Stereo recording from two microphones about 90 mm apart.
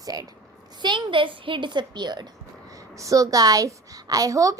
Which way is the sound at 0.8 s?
60° right (ahead or behind).